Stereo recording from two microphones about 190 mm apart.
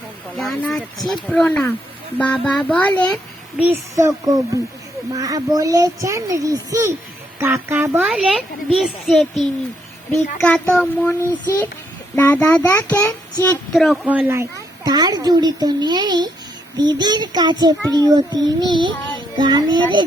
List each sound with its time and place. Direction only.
0.3 s a child's voice: 5° left (ahead or behind)
3.6 s a child's voice: 10° right (ahead or behind)
14.8 s a child's voice: 20° right (ahead or behind)